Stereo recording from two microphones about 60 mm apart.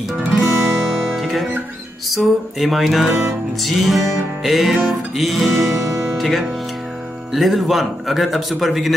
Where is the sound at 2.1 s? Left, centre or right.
Centre.